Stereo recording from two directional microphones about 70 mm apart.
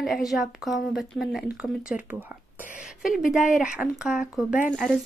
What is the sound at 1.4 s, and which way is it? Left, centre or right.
Speech, centre.